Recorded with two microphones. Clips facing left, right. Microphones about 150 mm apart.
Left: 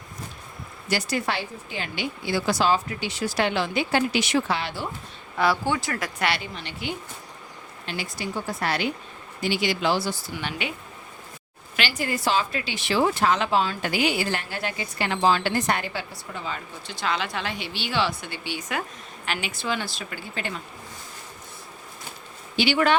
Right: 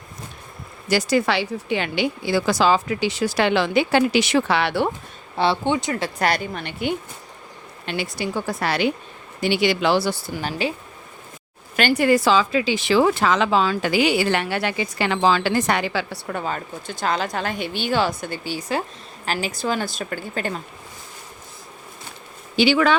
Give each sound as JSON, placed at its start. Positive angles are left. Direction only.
{"t": 0.9, "sound": "speech", "side_deg": -90}
{"t": 5.4, "sound": "speech", "side_deg": -25}
{"t": 6.1, "sound": "a woman's voice", "side_deg": -45}
{"t": 7.9, "sound": "speech", "side_deg": -70}
{"t": 9.4, "sound": "speech", "side_deg": -70}
{"t": 10.3, "sound": "speech", "side_deg": -35}
{"t": 11.8, "sound": "a woman's voice", "side_deg": -50}
{"t": 12.0, "sound": "a woman's voice", "side_deg": -90}